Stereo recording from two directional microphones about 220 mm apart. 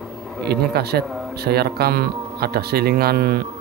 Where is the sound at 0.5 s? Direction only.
45° right (ahead or behind).